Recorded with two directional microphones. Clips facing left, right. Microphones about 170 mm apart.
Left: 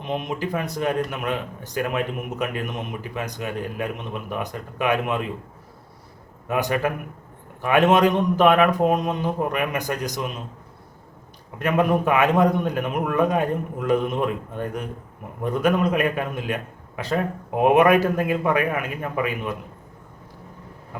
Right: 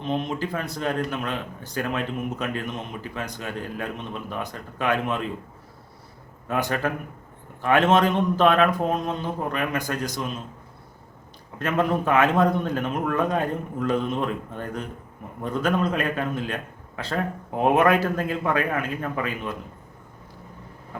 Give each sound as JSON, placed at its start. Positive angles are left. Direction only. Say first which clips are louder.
{"t": 0.0, "sound": "speech", "louder": "even", "side_deg": 15}
{"t": 6.5, "sound": "speech", "louder": "left 2 dB", "side_deg": 15}
{"t": 11.6, "sound": "speech", "louder": "left 3 dB", "side_deg": 15}